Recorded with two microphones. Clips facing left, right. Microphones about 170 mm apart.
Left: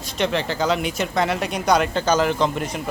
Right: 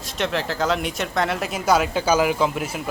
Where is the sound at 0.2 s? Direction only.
Centre (ahead or behind).